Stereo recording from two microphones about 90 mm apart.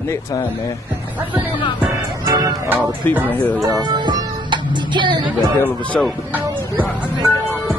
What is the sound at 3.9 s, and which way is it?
Music, 55° right (ahead or behind).